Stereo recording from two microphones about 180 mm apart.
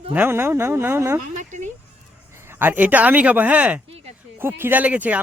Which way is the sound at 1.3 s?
45° right (ahead or behind).